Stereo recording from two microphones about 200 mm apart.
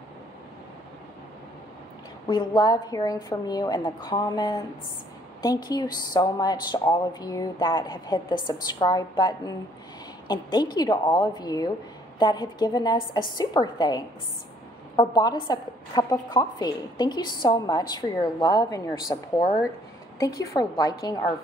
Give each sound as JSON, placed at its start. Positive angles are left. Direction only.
{"t": 2.2, "sound": "a woman's voice", "side_deg": 20}